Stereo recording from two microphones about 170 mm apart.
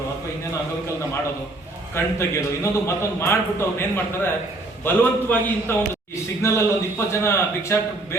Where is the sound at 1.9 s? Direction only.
15° left (ahead or behind).